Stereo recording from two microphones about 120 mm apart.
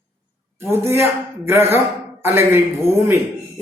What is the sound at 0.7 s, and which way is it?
A man's voice, 20° right (ahead or behind).